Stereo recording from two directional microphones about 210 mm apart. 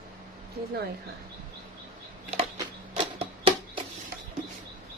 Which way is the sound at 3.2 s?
25° right (ahead or behind).